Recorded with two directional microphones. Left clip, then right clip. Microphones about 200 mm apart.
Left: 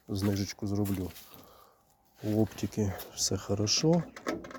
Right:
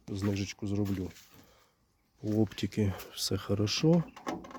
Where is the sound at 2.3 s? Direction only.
20° right (ahead or behind).